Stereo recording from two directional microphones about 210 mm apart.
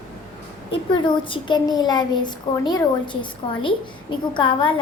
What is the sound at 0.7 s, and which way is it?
Speech, 20° left (ahead or behind).